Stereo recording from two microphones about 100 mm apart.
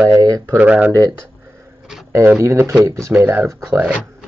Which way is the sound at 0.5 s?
10° right (ahead or behind).